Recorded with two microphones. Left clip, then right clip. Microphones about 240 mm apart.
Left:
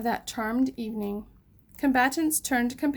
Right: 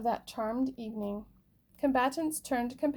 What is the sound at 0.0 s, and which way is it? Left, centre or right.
Speech, left.